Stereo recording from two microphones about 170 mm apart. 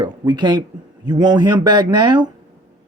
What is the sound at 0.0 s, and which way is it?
Speech, 25° right (ahead or behind).